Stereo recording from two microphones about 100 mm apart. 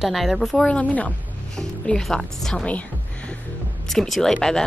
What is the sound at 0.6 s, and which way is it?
Speech, 15° left (ahead or behind).